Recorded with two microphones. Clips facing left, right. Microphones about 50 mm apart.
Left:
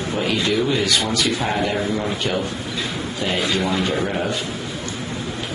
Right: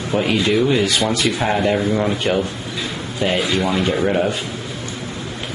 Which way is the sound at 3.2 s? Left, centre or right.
Centre.